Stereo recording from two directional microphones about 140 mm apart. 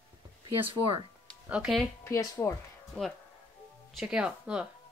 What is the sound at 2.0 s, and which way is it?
Speech, 20° left (ahead or behind).